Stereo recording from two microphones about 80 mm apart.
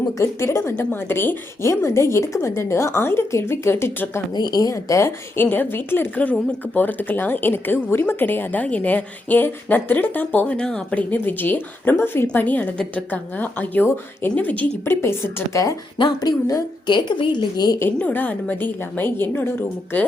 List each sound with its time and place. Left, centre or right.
0.2 s a woman's voice: left
4.4 s speech: left
4.7 s a woman's voice: left
5.4 s a woman's voice: left
11.1 s a woman's voice: left
15.0 s a woman's voice: left
16.0 s a woman's voice: left
17.7 s a woman's voice: left